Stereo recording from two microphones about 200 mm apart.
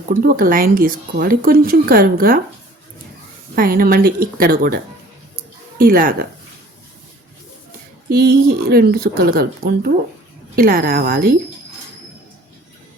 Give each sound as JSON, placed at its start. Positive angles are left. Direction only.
{"t": 0.1, "sound": "speech", "side_deg": -45}
{"t": 3.5, "sound": "speech", "side_deg": -45}
{"t": 8.1, "sound": "speech", "side_deg": -50}